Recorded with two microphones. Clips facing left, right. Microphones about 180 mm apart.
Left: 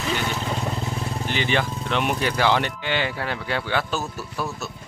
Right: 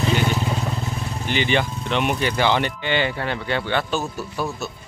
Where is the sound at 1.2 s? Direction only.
Centre (ahead or behind).